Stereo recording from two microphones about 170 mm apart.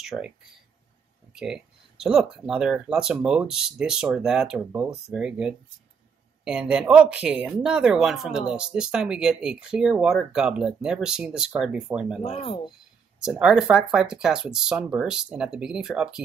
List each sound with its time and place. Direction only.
0.0 s speech: 5° right (ahead or behind)
1.3 s speech: 5° right (ahead or behind)
12.3 s speech: 35° left (ahead or behind)
13.2 s speech: 5° right (ahead or behind)